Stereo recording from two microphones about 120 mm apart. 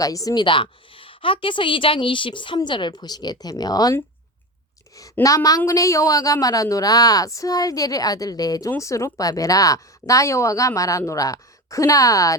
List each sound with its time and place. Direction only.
0.0 s speech: 30° left (ahead or behind)
0.4 s a woman's voice: 45° left (ahead or behind)
5.2 s speech: 30° left (ahead or behind)